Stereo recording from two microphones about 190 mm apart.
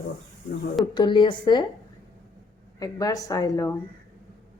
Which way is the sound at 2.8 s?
20° left (ahead or behind).